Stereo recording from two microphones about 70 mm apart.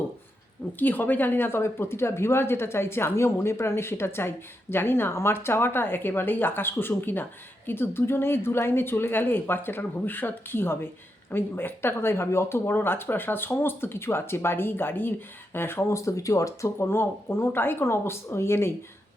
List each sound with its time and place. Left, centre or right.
0.8 s speech: left
16.8 s speech: left